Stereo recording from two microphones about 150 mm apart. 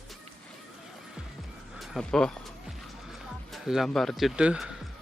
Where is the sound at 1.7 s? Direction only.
Centre (ahead or behind).